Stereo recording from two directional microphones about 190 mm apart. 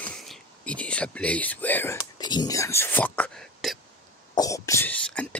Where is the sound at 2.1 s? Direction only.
20° left (ahead or behind); by 3.7 s 5° left (ahead or behind).